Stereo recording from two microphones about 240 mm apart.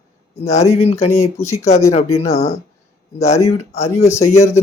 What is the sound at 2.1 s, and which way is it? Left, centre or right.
Speech, left.